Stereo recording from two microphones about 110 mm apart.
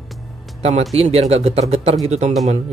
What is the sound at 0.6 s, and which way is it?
Speech, 80° right.